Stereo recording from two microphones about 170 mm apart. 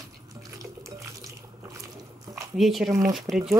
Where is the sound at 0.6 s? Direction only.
20° right (ahead or behind).